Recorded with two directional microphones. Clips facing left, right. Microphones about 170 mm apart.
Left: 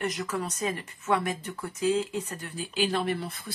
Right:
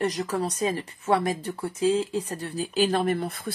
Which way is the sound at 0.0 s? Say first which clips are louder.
Right 5 dB; 35° right (ahead or behind).